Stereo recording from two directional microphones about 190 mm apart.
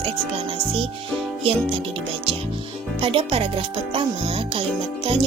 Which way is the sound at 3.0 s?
30° right (ahead or behind).